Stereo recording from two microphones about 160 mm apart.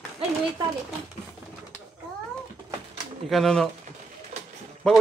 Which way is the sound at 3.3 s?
Centre (ahead or behind).